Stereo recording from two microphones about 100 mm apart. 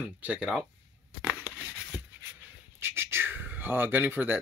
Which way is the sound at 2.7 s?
25° right (ahead or behind).